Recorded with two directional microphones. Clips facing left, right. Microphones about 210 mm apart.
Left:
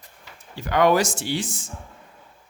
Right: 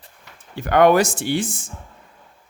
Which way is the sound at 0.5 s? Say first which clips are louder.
Right 4 dB; 55° right (ahead or behind).